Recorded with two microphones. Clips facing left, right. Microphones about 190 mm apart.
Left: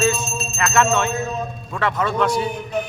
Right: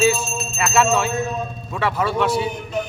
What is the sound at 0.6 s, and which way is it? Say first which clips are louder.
Music: even; 10° right (ahead or behind).